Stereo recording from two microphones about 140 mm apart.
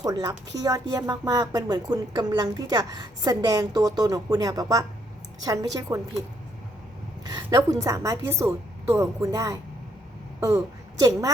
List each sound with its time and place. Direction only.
0.0 s a woman's voice: 25° right (ahead or behind)
7.3 s a woman's voice: 25° right (ahead or behind)